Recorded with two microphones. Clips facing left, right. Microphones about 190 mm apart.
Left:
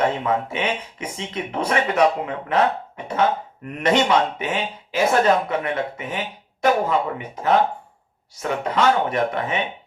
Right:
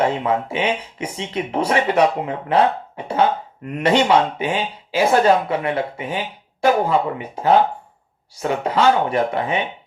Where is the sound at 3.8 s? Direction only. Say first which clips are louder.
Right 2 dB; 30° right (ahead or behind).